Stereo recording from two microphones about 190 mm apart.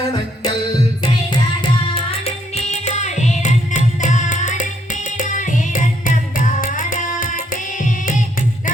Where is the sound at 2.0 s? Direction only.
30° left (ahead or behind).